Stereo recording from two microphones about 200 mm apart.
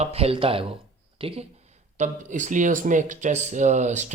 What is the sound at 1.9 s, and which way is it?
Speech, 40° right (ahead or behind).